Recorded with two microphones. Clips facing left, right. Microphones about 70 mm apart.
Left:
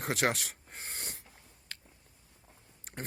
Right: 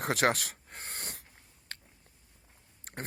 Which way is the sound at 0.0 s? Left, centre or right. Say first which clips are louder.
Right 3 dB; right.